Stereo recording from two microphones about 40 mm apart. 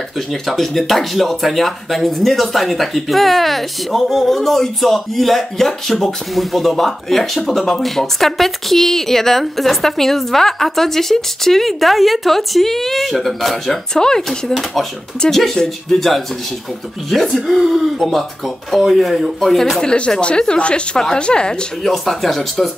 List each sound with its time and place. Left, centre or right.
0.3 s speech: centre
13.9 s speech: centre
15.2 s speech: centre
19.8 s speech: centre
21.8 s speech: centre